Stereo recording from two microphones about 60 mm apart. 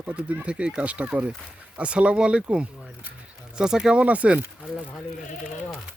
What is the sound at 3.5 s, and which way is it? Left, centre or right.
Speech, centre.